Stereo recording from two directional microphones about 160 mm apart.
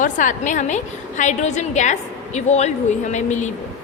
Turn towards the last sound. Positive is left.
turn(degrees=50)  # may be behind; listen again after turning